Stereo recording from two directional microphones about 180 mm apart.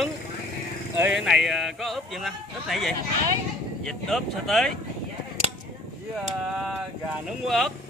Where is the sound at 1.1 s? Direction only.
Centre (ahead or behind).